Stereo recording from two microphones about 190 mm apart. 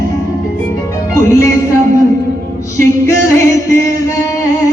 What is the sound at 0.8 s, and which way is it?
Music, 15° left (ahead or behind).